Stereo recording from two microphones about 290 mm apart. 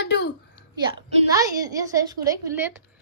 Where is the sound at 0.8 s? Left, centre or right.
Centre.